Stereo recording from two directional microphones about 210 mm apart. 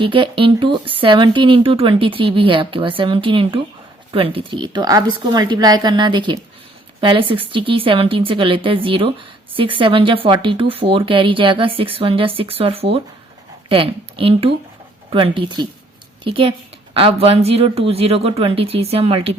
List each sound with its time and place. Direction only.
0.0 s a woman's voice: 25° right (ahead or behind)